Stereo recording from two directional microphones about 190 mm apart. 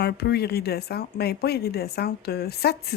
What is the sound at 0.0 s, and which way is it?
Speech, 55° left (ahead or behind).